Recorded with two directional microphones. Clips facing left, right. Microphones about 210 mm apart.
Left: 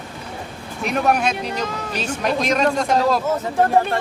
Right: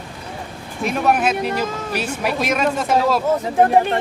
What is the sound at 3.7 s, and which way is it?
Speech, 15° right (ahead or behind).